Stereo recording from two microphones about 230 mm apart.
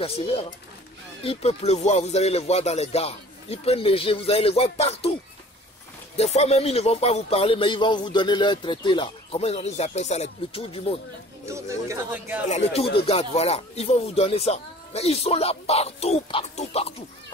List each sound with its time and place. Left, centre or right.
0.0 s speech: left
6.1 s speech: left
11.4 s speech: centre
12.4 s speech: left